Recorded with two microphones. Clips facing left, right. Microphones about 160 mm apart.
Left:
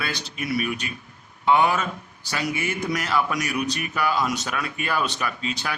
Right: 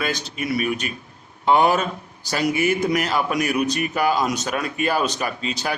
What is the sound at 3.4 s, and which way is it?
Speech, 45° right (ahead or behind).